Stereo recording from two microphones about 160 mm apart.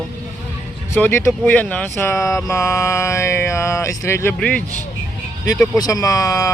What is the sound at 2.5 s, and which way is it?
Speech, 15° left (ahead or behind).